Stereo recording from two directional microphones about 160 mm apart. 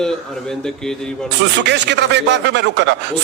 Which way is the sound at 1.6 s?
90° right.